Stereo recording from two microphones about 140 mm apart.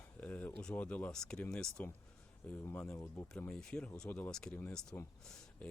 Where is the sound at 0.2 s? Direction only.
10° left (ahead or behind).